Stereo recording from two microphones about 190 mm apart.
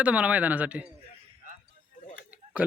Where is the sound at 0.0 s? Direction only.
5° right (ahead or behind).